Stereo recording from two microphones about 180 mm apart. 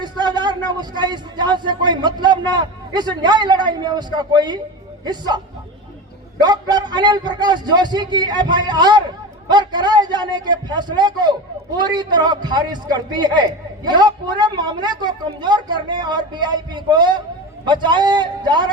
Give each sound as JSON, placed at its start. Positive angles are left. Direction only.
{"t": 0.0, "sound": "a sound", "side_deg": -25}
{"t": 0.7, "sound": "a man's voice", "side_deg": -25}
{"t": 6.4, "sound": "a man's voice", "side_deg": -25}